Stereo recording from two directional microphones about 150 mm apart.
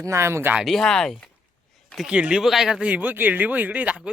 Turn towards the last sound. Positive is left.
turn(degrees=-10)  # may be behind; listen again after turning